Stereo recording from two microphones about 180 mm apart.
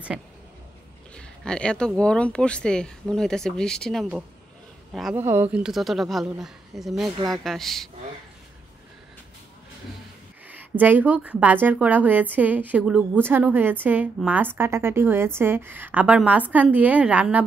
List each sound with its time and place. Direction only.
1.1 s speech: 5° left (ahead or behind)
5.1 s speech: 10° right (ahead or behind)
10.5 s a woman's voice: 10° right (ahead or behind)